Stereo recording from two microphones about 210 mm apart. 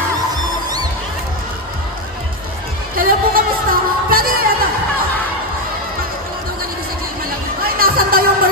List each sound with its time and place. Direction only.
3.0 s music: 45° right (ahead or behind)
7.6 s music: 45° right (ahead or behind)